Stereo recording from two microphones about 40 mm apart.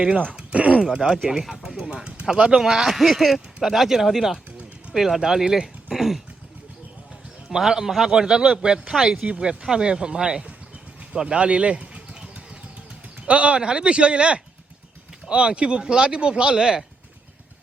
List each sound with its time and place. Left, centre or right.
0.3 s groan: right
0.9 s a man's voice: centre
1.8 s a man's voice: right
7.5 s a man's voice: centre